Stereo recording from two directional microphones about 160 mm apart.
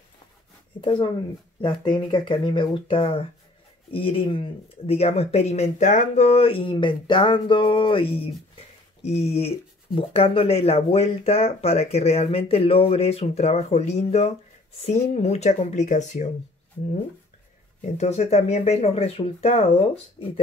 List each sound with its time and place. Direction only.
0.7 s speech: 30° left (ahead or behind); by 16.3 s 50° left (ahead or behind)
17.9 s speech: 45° left (ahead or behind)